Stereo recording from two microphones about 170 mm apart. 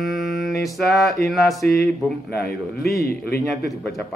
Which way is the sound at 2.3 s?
65° left (ahead or behind).